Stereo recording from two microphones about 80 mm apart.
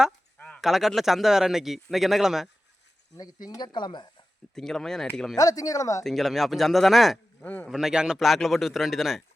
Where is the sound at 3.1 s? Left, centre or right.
Left.